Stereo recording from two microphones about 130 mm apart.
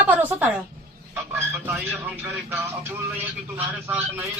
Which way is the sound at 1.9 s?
5° right (ahead or behind).